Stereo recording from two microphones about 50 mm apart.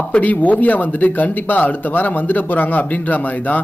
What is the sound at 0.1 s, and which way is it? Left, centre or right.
Speech, left.